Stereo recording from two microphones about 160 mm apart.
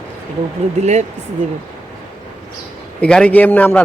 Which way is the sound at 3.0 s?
5° left (ahead or behind).